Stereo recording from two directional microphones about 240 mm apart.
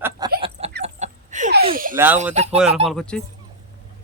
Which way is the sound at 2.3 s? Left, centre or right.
Right.